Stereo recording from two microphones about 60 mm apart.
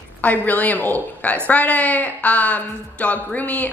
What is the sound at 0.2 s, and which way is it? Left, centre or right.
A woman's voice, left.